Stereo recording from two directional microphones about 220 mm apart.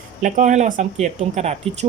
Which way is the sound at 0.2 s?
35° right (ahead or behind).